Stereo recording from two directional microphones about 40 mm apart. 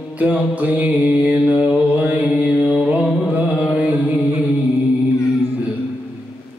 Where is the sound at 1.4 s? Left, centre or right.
Right.